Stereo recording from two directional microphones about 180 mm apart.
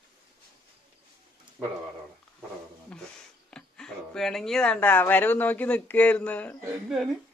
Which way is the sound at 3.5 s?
5° left (ahead or behind).